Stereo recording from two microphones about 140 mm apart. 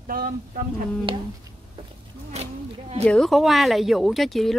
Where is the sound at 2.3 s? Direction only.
50° right (ahead or behind).